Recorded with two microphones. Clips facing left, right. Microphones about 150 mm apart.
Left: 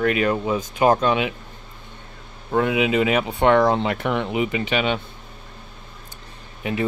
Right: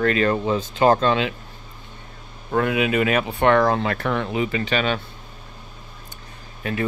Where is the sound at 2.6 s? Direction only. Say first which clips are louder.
Left 1 dB; 15° left (ahead or behind).